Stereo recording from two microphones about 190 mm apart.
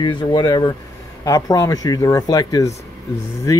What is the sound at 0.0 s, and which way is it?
A man's voice, 25° left (ahead or behind).